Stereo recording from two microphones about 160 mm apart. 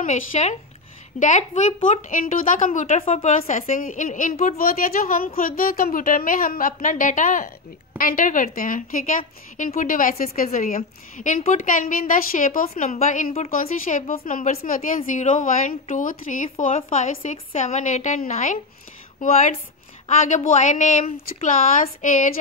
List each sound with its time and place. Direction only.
0.0 s a woman's voice: 50° left (ahead or behind)